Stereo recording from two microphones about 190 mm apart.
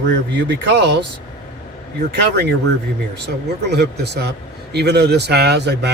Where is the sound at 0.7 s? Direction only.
65° right (ahead or behind).